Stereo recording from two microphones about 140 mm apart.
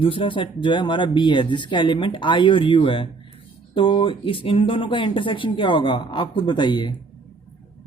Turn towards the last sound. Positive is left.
turn(degrees=35)  # may be behind; listen again after turning